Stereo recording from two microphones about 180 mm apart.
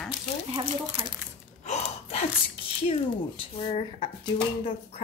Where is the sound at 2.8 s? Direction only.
30° left (ahead or behind).